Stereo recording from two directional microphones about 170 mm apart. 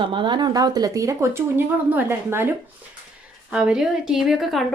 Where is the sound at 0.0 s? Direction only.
30° right (ahead or behind); by 2.5 s 15° right (ahead or behind).